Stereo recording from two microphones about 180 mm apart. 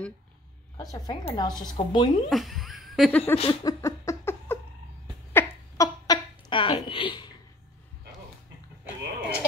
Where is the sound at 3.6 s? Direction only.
15° left (ahead or behind).